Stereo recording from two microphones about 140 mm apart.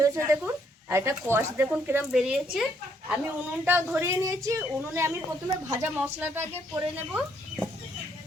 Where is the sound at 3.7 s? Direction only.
15° right (ahead or behind).